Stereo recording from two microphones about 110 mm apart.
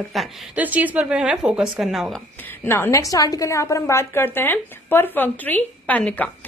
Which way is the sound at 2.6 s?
25° left (ahead or behind).